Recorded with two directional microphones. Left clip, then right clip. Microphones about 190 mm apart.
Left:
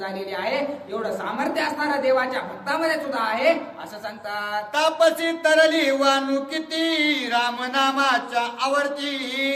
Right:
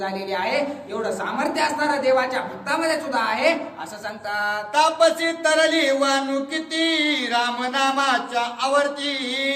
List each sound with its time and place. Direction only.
0.3 s a woman's voice: 15° right (ahead or behind)
4.7 s speech: 20° left (ahead or behind)